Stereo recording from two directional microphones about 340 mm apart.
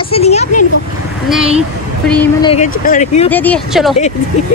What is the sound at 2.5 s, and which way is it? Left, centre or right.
Speech, left.